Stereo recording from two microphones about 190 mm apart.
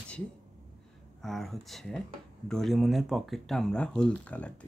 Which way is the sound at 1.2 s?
Centre (ahead or behind).